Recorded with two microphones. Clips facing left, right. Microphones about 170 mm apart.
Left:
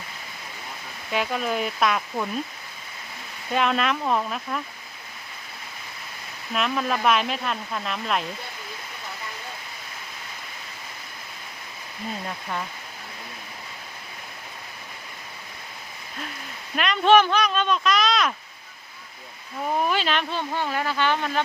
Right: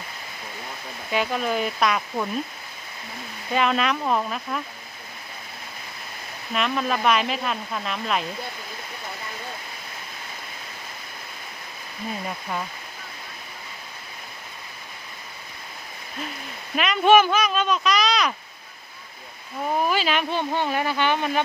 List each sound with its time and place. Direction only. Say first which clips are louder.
1.1 s speech: right 1 dB; centre (ahead or behind)
3.5 s speech: right 1 dB; centre (ahead or behind)
6.5 s speech: right 1 dB; centre (ahead or behind)
16.7 s speech: right 1 dB; 5° right (ahead or behind)
19.8 s speech: right 1 dB; 5° right (ahead or behind)
20.3 s speech: right 3 dB; 20° right (ahead or behind)